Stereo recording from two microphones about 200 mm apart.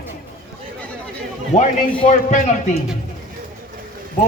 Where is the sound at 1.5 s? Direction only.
35° left (ahead or behind).